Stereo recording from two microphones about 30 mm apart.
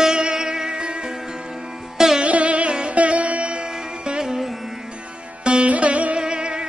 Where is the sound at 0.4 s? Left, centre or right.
Right.